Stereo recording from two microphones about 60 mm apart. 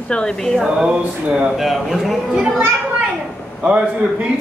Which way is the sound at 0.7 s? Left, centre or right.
Centre.